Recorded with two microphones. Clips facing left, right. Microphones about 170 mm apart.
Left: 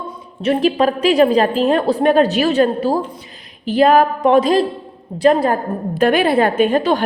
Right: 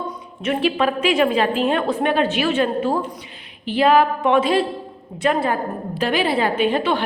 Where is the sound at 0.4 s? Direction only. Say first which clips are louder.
Left 5 dB; 40° left (ahead or behind).